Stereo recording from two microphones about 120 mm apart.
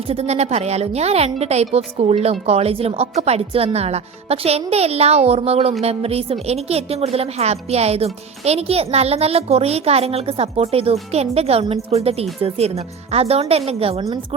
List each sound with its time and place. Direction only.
0.1 s a woman's voice: 60° right (ahead or behind)